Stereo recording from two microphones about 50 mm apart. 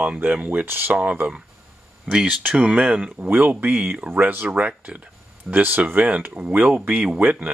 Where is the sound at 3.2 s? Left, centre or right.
Right.